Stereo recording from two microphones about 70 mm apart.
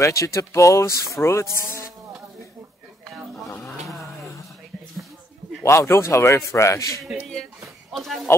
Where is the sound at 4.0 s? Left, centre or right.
Left.